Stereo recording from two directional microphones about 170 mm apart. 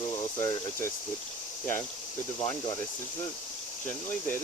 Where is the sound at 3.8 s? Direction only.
10° left (ahead or behind).